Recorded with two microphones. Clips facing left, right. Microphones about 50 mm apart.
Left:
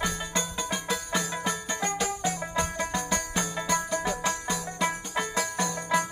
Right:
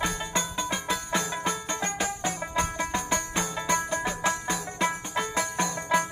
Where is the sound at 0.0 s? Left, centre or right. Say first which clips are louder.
Right 1 dB; centre.